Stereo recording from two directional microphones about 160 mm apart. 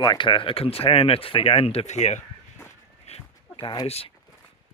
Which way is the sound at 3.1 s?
30° left (ahead or behind).